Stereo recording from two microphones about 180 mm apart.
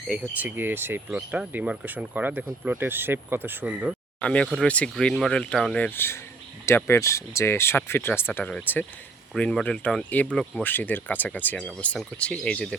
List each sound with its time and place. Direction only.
0.1 s speech: 10° right (ahead or behind)
4.2 s speech: 5° left (ahead or behind)